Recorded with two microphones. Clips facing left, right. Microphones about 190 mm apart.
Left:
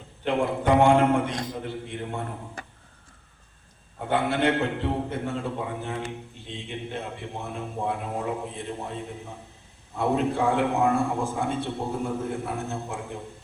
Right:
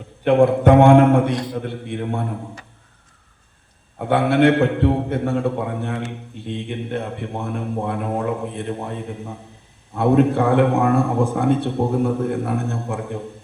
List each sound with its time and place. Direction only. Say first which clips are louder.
0.3 s a man's voice: right 9 dB; 55° right (ahead or behind)
3.9 s a man's voice: right 8 dB; 65° right (ahead or behind)